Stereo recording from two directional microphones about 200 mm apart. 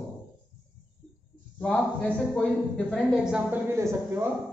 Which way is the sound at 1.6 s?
5° left (ahead or behind).